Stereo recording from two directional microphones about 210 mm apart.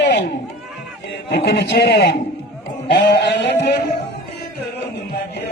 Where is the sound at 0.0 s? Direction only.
55° left (ahead or behind).